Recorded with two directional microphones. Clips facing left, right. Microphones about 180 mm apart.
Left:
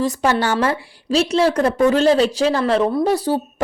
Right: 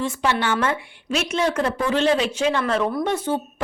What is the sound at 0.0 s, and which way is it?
Speech, 40° left (ahead or behind).